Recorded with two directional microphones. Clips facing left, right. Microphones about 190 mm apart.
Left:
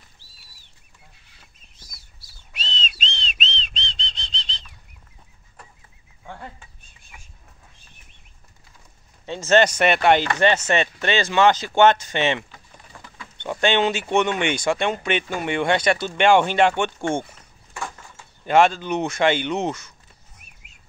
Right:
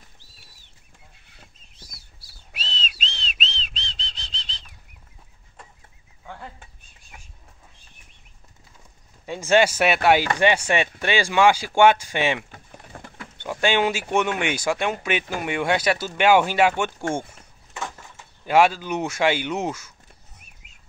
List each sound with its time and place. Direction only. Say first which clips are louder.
1.8 s a sound: right 3 dB; 30° right (ahead or behind)
2.5 s whistling: left 2 dB; 5° right (ahead or behind)
9.2 s speech: left 1 dB; 10° right (ahead or behind)
12.4 s bird: right 3 dB; 50° right (ahead or behind)
13.4 s speech: left 1 dB; 5° right (ahead or behind)
18.4 s speech: left 1 dB; 5° right (ahead or behind)